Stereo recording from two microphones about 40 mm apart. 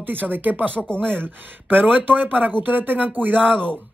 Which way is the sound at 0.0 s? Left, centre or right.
Right.